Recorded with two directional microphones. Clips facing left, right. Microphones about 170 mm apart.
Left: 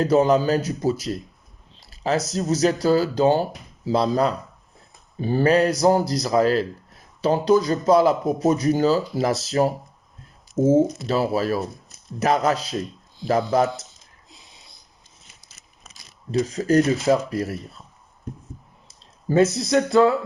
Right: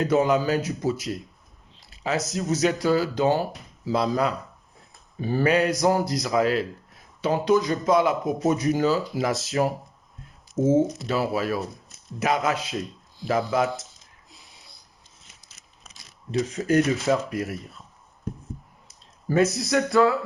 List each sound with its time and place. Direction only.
0.0 s speech: 35° left (ahead or behind)
14.3 s a sound: 20° left (ahead or behind)
16.3 s speech: 35° left (ahead or behind)
19.3 s speech: 25° left (ahead or behind)